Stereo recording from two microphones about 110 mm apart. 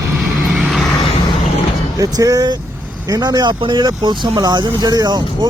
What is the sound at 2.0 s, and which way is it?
Speech, 35° right (ahead or behind).